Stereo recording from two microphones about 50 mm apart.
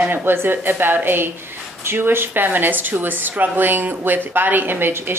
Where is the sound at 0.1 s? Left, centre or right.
Right.